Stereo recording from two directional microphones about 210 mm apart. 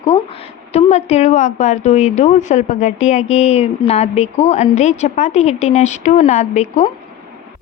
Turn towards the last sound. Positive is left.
turn(degrees=30)  # may be behind; listen again after turning